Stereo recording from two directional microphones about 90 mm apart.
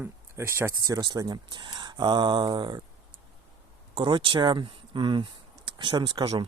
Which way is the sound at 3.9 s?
70° right (ahead or behind).